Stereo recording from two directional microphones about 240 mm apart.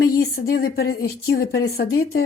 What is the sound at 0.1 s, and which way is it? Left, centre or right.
Speech, left.